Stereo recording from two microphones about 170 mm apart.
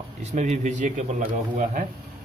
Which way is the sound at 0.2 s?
40° right (ahead or behind).